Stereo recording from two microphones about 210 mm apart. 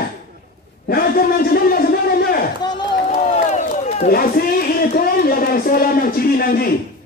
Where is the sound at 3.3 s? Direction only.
35° left (ahead or behind).